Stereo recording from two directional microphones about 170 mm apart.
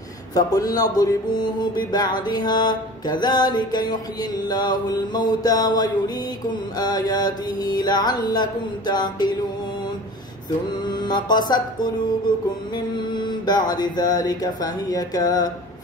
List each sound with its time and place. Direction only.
0.3 s music: 20° left (ahead or behind)
10.7 s music: 25° left (ahead or behind)